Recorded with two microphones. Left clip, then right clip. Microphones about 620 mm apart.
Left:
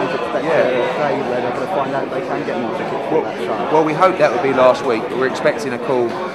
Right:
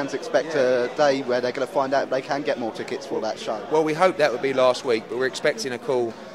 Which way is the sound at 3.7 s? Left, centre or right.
Right.